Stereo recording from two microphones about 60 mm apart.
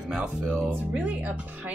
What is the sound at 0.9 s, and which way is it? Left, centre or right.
Speech, right.